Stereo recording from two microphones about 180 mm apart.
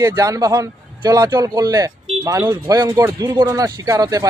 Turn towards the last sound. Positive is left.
turn(degrees=-20)  # may be behind; listen again after turning